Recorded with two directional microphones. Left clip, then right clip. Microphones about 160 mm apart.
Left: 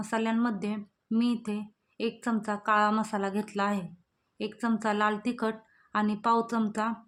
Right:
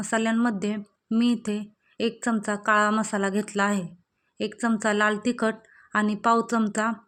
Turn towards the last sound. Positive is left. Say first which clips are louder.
# right 5 dB
turn(degrees=-30)  # may be behind; listen again after turning